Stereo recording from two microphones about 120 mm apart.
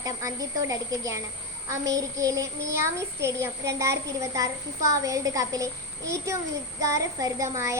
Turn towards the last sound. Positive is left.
turn(degrees=-25)  # may be behind; listen again after turning